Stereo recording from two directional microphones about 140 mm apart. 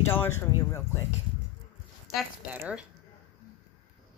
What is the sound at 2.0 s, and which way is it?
Speech, 5° right (ahead or behind).